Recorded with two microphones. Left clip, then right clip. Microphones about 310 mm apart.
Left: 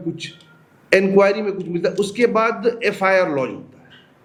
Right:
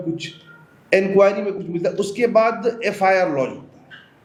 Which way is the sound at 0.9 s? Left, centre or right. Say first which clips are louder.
Left 1 dB; left.